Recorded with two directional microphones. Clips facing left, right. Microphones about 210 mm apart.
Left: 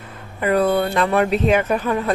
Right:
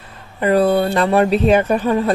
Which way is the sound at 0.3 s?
30° right (ahead or behind).